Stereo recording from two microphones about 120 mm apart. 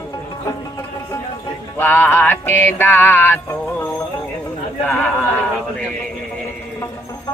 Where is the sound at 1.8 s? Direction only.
15° left (ahead or behind).